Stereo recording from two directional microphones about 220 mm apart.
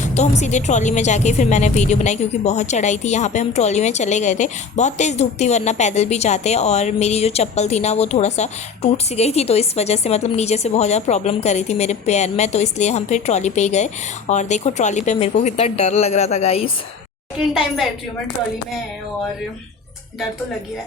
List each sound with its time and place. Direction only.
0.1 s speech: 30° left (ahead or behind)
17.4 s a woman's voice: centre (ahead or behind)